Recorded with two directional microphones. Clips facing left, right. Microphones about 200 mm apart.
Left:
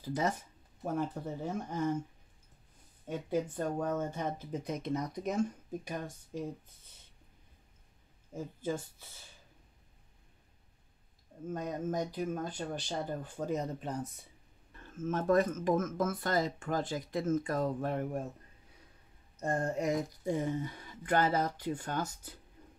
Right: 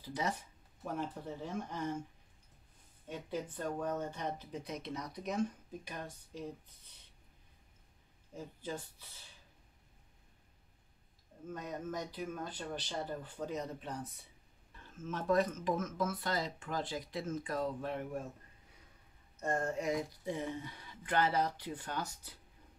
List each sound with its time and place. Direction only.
0.0 s speech: 45° left (ahead or behind)
3.1 s speech: 50° left (ahead or behind)
11.5 s speech: 45° left (ahead or behind)
15.0 s speech: 50° left (ahead or behind)
19.4 s speech: 40° left (ahead or behind)